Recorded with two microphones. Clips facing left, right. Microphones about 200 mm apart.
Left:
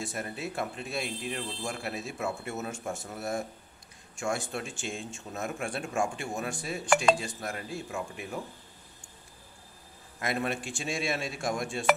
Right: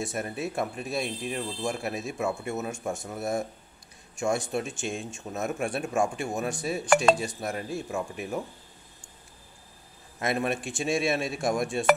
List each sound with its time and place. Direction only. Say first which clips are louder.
0.0 s speech: right 4 dB; 20° right (ahead or behind)
10.1 s speech: right 4 dB; 20° right (ahead or behind)